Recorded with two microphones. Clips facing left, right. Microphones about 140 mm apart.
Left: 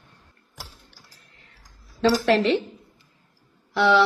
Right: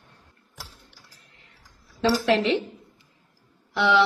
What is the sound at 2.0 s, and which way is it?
Speech, 20° right (ahead or behind).